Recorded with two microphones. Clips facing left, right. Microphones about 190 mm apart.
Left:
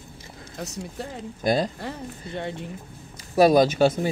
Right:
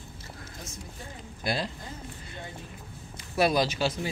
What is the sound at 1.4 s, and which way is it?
Speech, 45° left (ahead or behind).